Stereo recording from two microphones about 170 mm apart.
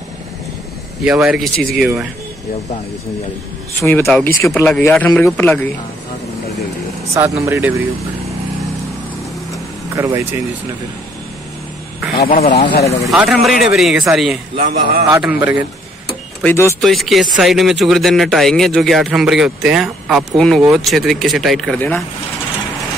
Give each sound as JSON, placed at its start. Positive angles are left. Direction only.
{"t": 1.0, "sound": "speech", "side_deg": -5}
{"t": 3.8, "sound": "speech", "side_deg": 15}
{"t": 7.4, "sound": "speech", "side_deg": -15}
{"t": 9.9, "sound": "speech", "side_deg": -15}
{"t": 12.3, "sound": "speech", "side_deg": 35}
{"t": 13.1, "sound": "speech", "side_deg": -5}
{"t": 14.6, "sound": "a man's voice", "side_deg": -50}
{"t": 15.1, "sound": "speech", "side_deg": -10}
{"t": 16.4, "sound": "speech", "side_deg": 15}
{"t": 16.8, "sound": "speech", "side_deg": 0}